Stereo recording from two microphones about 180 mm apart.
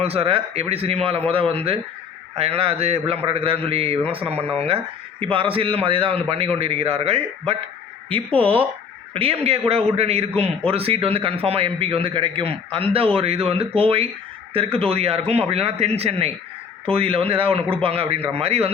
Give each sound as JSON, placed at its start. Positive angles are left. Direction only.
{"t": 0.0, "sound": "a man's voice", "side_deg": -35}